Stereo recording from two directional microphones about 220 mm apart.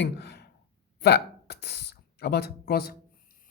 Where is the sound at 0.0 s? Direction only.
50° left (ahead or behind).